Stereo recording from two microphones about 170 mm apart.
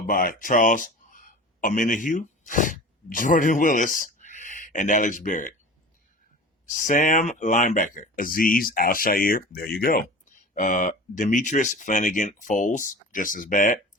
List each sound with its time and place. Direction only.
0.1 s speech: 55° left (ahead or behind)
6.7 s speech: 50° left (ahead or behind)
10.5 s speech: 50° left (ahead or behind)